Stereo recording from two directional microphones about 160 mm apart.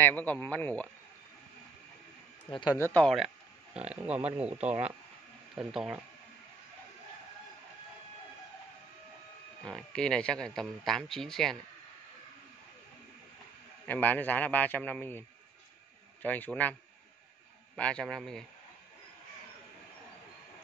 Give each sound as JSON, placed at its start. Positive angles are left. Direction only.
{"t": 0.0, "sound": "a man's voice", "side_deg": 10}
{"t": 2.8, "sound": "a man's voice", "side_deg": 10}
{"t": 3.9, "sound": "speech", "side_deg": -5}
{"t": 9.7, "sound": "speech", "side_deg": 5}
{"t": 13.8, "sound": "a man's voice", "side_deg": 10}
{"t": 17.7, "sound": "speech", "side_deg": 5}